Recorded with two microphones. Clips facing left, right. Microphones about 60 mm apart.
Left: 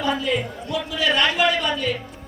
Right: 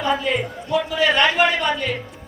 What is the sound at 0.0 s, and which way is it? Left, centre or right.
A man's voice, right.